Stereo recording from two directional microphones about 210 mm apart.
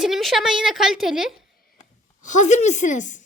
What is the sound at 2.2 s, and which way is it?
Speech, 35° left (ahead or behind).